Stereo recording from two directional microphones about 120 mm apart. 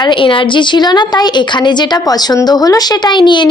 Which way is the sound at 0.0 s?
45° left (ahead or behind).